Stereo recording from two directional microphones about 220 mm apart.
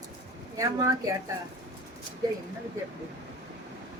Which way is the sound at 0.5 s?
15° right (ahead or behind).